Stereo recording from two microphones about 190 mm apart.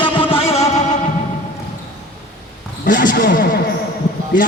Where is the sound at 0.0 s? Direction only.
30° left (ahead or behind).